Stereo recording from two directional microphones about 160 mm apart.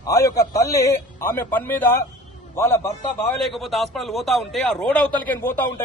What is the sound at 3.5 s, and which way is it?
A man's voice, centre (ahead or behind).